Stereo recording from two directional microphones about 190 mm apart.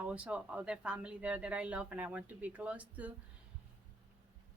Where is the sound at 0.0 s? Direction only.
5° right (ahead or behind).